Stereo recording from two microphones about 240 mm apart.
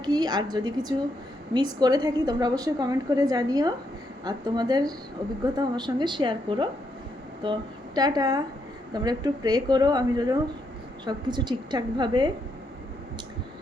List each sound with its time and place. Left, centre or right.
0.0 s a woman's voice: centre